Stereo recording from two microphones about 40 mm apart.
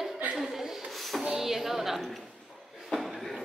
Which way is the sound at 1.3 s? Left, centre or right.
Centre.